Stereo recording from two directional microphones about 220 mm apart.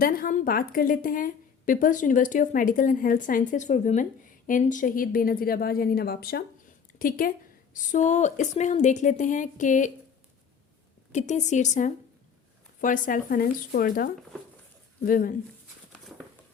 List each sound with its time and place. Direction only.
0.0 s a woman's voice: 40° left (ahead or behind)
11.1 s a woman's voice: 30° left (ahead or behind)